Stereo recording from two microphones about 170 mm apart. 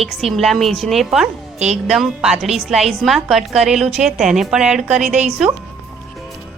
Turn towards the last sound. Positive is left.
turn(degrees=-5)  # may be behind; listen again after turning